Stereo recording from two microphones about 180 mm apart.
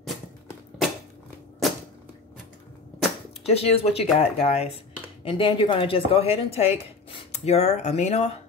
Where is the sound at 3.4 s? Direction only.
35° left (ahead or behind).